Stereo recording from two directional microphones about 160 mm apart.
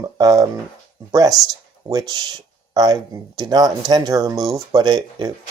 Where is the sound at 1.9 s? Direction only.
25° right (ahead or behind).